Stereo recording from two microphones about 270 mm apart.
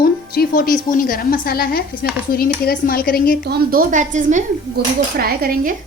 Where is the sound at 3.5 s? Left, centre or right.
Right.